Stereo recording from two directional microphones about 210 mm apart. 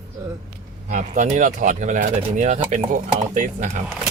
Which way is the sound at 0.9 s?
35° right (ahead or behind).